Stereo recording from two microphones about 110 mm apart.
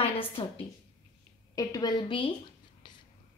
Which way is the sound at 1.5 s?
35° left (ahead or behind).